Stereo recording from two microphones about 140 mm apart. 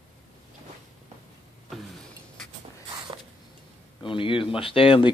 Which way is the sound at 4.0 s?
40° left (ahead or behind).